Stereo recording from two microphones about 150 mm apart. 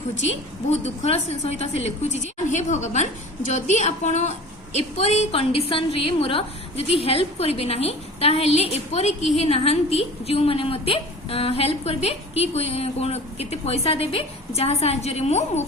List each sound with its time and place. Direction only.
0.7 s a woman's voice: 45° left (ahead or behind)